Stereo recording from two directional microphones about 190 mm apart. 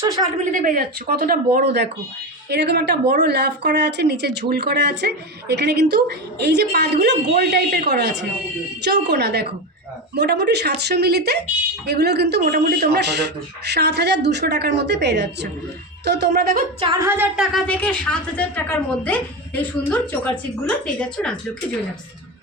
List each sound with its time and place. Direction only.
0.5 s a woman's voice: 45° right (ahead or behind)
16.8 s a sound: 20° right (ahead or behind)
17.5 s a woman's voice: 5° left (ahead or behind)